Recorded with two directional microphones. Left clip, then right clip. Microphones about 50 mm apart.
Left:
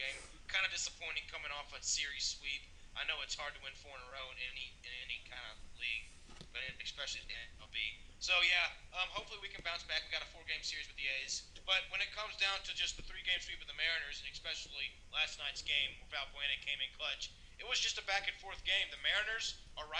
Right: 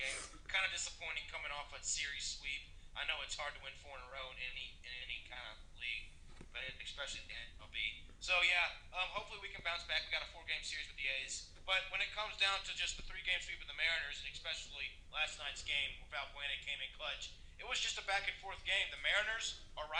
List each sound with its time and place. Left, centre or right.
0.0 s a man's voice: right